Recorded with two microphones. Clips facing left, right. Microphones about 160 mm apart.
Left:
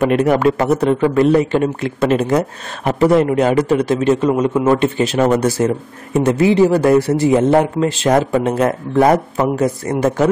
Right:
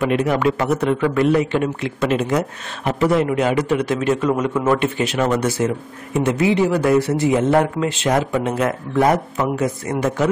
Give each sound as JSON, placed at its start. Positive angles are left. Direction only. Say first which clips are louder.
{"t": 0.0, "sound": "a man's voice", "louder": "left 4 dB", "side_deg": 45}